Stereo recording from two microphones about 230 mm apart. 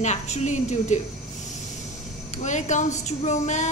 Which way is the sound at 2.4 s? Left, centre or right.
Left.